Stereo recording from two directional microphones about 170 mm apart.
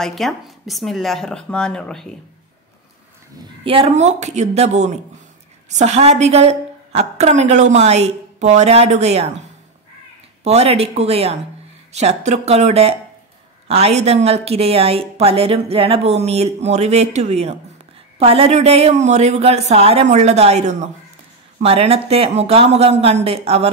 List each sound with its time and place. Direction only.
0.0 s speech: centre (ahead or behind)
3.6 s a woman's voice: 35° right (ahead or behind)
10.4 s a woman's voice: 40° right (ahead or behind)